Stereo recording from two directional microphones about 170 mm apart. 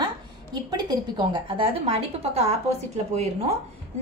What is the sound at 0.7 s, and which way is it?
A woman's voice, 25° right (ahead or behind).